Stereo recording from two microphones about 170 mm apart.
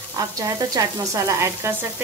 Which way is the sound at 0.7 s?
20° right (ahead or behind).